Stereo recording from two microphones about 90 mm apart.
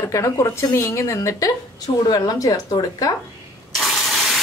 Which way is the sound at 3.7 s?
Centre (ahead or behind).